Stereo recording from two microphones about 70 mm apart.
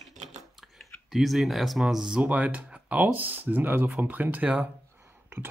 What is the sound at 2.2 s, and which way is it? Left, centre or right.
Speech, right.